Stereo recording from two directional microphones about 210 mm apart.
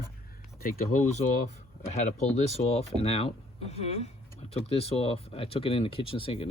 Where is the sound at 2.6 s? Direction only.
30° left (ahead or behind).